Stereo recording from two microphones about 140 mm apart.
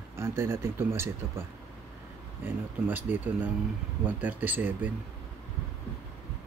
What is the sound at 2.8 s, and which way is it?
Speech, 15° right (ahead or behind).